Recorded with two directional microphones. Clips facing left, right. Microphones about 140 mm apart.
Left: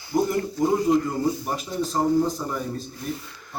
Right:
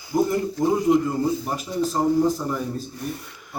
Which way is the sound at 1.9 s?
5° right (ahead or behind).